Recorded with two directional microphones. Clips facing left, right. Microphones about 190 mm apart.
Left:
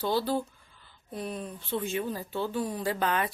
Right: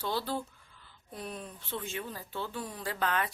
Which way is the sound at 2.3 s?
15° left (ahead or behind).